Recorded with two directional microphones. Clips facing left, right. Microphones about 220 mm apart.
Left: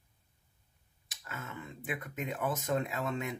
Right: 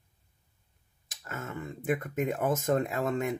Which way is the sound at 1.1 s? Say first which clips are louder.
Right 6 dB; 45° right (ahead or behind).